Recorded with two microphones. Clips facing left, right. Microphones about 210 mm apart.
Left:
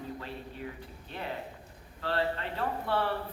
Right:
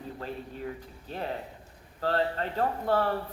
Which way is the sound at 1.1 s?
40° right (ahead or behind).